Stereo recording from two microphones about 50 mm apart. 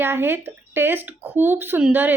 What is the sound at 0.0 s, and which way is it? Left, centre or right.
A woman's voice, right.